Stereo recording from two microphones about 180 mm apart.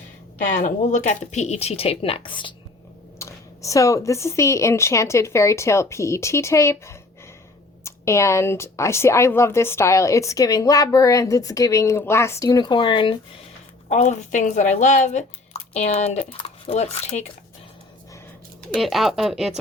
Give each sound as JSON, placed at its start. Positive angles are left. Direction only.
{"t": 0.4, "sound": "speech", "side_deg": 45}
{"t": 3.2, "sound": "a woman's voice", "side_deg": 15}
{"t": 13.8, "sound": "speech", "side_deg": 40}
{"t": 18.7, "sound": "speech", "side_deg": 0}